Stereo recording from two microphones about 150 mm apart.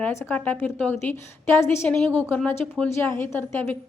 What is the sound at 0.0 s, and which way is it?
A woman's voice, 15° left (ahead or behind).